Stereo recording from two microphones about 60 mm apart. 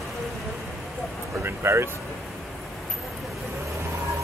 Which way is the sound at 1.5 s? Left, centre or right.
Right.